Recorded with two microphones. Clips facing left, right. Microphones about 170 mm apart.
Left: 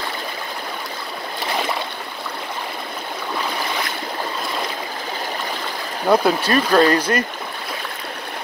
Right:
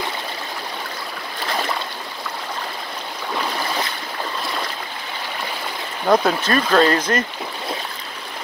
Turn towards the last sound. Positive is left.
turn(degrees=10)  # may be behind; listen again after turning